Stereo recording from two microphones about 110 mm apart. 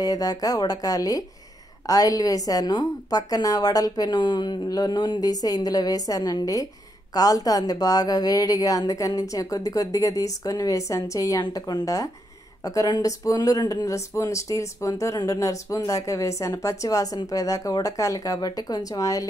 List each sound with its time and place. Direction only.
0.0 s speech: 35° left (ahead or behind)